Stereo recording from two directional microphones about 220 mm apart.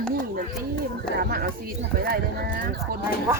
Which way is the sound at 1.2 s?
45° right (ahead or behind).